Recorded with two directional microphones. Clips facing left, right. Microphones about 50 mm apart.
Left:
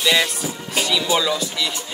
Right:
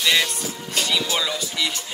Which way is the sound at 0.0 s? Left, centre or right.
Centre.